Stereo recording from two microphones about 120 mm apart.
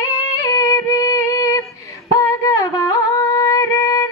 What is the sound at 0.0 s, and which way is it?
Music, 25° left (ahead or behind).